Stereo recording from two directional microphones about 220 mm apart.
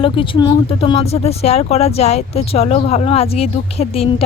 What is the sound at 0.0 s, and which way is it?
Speech, 25° left (ahead or behind).